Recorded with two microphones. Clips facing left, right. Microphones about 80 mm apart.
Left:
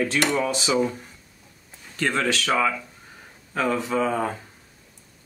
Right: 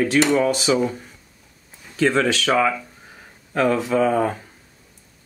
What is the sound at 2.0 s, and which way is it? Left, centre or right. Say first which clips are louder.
Speech: right 5 dB; centre.